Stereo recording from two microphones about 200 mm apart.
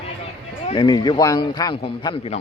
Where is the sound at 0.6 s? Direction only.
25° left (ahead or behind).